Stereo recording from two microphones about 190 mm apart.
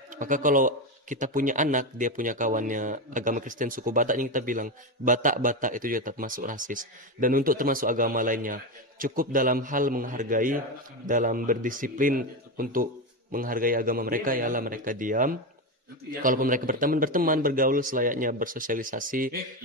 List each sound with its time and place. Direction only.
0.2 s a man's voice: 45° right (ahead or behind)